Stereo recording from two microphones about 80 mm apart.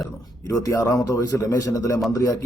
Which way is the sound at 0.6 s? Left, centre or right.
Left.